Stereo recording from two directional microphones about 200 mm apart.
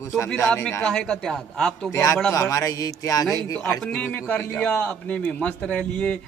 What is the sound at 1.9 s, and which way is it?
A man's voice, 15° left (ahead or behind).